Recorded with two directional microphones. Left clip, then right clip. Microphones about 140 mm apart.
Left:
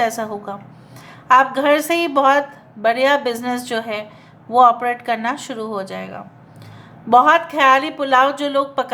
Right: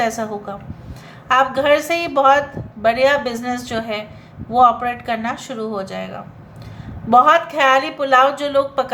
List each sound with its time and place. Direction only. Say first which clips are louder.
0.0 s speech: even; 25° left (ahead or behind)